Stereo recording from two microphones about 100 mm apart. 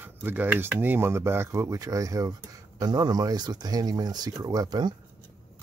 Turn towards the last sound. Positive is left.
turn(degrees=-45)  # may be behind; listen again after turning